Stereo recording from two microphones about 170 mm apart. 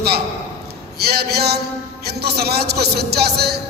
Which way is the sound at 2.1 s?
70° right (ahead or behind).